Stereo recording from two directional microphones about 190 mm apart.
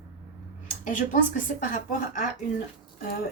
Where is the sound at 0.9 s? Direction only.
40° left (ahead or behind).